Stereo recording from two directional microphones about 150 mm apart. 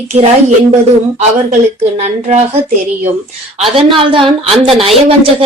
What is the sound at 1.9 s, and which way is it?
Speech, 50° right (ahead or behind).